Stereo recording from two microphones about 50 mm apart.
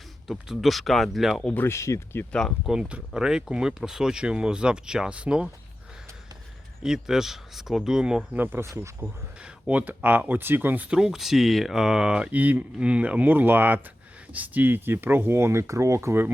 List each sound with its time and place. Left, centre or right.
0.3 s speech: centre
1.6 s speech: left
2.2 s speech: left
2.6 s speech: centre
6.8 s speech: centre
8.4 s speech: right
9.0 s speech: right
9.4 s speech: right
10.8 s speech: centre
12.3 s speech: right
13.2 s speech: right